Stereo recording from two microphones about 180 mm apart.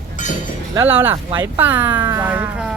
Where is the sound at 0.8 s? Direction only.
10° right (ahead or behind).